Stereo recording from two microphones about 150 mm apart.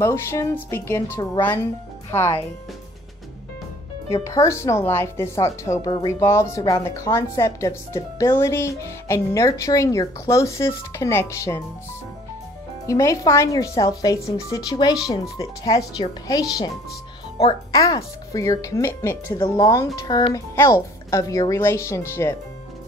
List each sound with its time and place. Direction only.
0.0 s speech: 15° left (ahead or behind)
4.1 s speech: 20° left (ahead or behind)
12.8 s speech: 20° left (ahead or behind)